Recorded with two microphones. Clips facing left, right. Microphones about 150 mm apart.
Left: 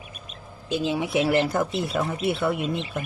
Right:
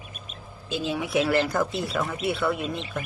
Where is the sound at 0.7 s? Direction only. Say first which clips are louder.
Left 2 dB; 20° left (ahead or behind).